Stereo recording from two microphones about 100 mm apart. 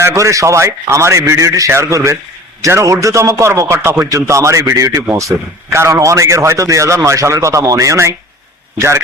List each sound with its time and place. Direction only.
0.0 s a man's voice: 30° right (ahead or behind)